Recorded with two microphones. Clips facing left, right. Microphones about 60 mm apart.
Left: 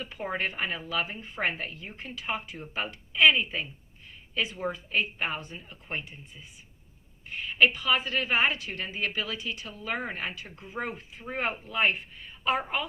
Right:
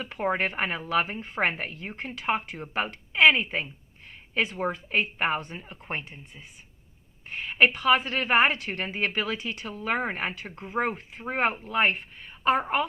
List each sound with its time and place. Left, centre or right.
0.0 s a woman's voice: right